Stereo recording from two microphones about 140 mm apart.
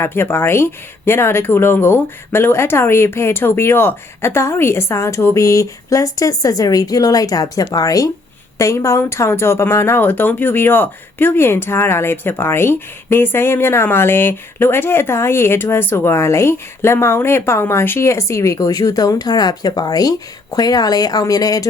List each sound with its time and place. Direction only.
0.0 s speech: 15° left (ahead or behind)